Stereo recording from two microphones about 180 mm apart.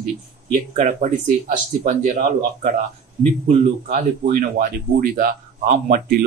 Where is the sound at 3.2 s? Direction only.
35° right (ahead or behind).